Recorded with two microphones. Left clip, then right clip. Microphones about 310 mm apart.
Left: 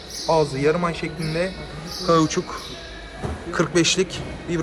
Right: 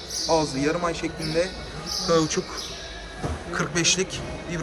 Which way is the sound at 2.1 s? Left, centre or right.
Centre.